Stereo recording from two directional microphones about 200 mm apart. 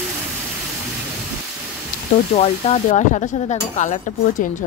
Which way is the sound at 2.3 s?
35° left (ahead or behind).